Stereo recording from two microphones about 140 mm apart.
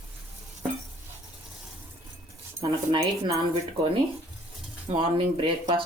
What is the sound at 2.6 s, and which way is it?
Speech, 25° right (ahead or behind).